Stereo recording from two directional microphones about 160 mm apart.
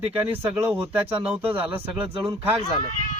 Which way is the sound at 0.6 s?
15° right (ahead or behind).